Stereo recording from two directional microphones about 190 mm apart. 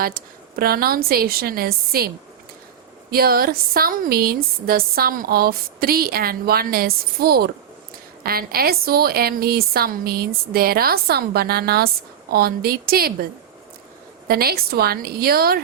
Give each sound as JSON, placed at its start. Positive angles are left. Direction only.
{"t": 0.0, "sound": "speech", "side_deg": -50}
{"t": 14.3, "sound": "speech", "side_deg": -55}